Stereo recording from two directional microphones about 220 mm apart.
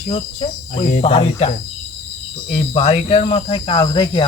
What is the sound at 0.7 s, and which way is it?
Cricket, 40° left (ahead or behind).